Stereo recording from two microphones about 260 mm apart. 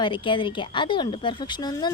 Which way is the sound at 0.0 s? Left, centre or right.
Centre.